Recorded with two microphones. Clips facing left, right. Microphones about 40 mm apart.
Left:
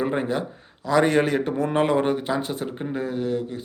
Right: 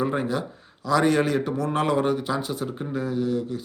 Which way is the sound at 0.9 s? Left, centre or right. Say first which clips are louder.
Left 1 dB; left.